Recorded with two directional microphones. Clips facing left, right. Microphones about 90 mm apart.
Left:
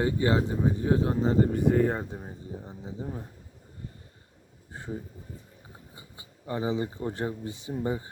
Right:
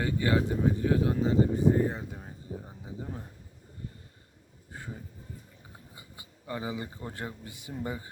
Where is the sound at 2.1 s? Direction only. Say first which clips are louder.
Left 3 dB; 20° left (ahead or behind).